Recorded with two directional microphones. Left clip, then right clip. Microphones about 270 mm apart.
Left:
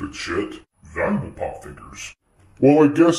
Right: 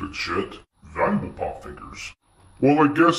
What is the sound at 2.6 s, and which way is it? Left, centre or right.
Speech, centre.